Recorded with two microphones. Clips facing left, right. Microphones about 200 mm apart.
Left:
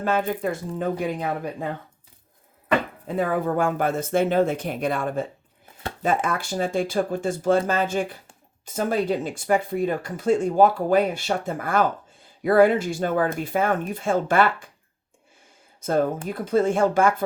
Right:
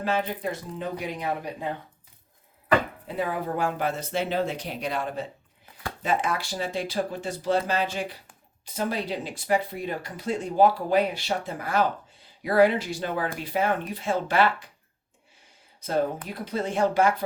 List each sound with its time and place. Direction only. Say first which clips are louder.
0.0 s speech: left 4 dB; 50° left (ahead or behind)
3.2 s speech: left 5 dB; 50° left (ahead or behind)
15.8 s speech: left 4 dB; 50° left (ahead or behind)